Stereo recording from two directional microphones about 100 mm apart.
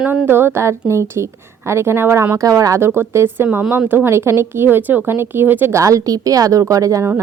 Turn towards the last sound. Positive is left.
turn(degrees=-35)  # may be behind; listen again after turning